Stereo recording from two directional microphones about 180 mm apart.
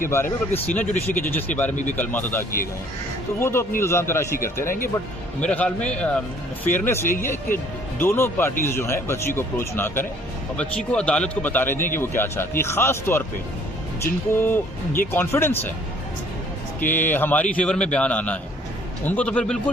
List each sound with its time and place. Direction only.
0.1 s a man's voice: 10° left (ahead or behind)
1.7 s a man's voice: 45° left (ahead or behind)
2.0 s a man's voice: 10° left (ahead or behind)
3.4 s a man's voice: 15° left (ahead or behind)
16.8 s a man's voice: 10° left (ahead or behind)